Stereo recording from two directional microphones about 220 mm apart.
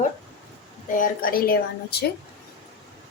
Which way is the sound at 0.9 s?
40° left (ahead or behind).